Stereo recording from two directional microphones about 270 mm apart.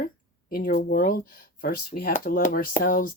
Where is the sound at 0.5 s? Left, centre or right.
Left.